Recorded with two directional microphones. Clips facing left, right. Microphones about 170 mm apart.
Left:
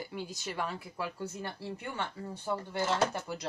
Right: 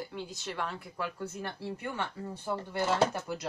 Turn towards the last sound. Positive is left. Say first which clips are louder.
# right 2 dB
turn(degrees=0)  # may be behind; listen again after turning